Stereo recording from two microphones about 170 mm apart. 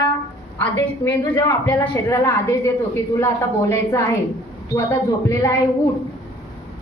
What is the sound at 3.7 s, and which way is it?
A woman's voice, 15° left (ahead or behind).